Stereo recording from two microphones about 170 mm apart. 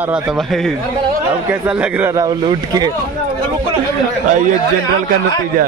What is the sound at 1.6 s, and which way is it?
Speech, 10° right (ahead or behind).